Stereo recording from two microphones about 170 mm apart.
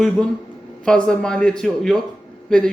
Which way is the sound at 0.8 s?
5° left (ahead or behind).